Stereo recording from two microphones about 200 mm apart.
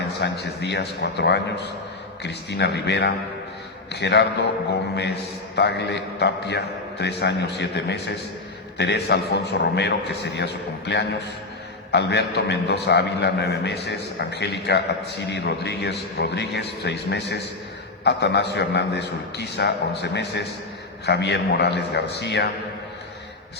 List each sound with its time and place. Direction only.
0.2 s a man's voice: 55° left (ahead or behind)
5.5 s a man's voice: 60° left (ahead or behind)